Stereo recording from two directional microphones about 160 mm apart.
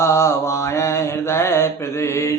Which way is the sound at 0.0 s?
15° left (ahead or behind).